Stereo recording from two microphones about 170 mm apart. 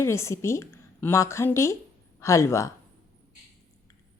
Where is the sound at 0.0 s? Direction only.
15° left (ahead or behind).